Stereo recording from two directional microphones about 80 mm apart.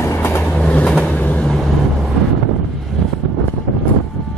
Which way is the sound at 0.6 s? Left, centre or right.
Centre.